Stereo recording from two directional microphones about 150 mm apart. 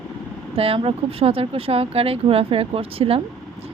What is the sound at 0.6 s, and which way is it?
Speech, 40° right (ahead or behind).